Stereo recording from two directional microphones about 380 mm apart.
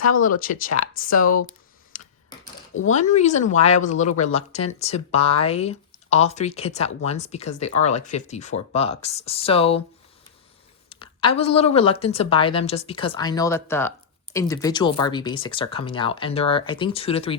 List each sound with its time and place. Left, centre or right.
0.2 s speech: left
2.7 s speech: centre
10.8 s speech: centre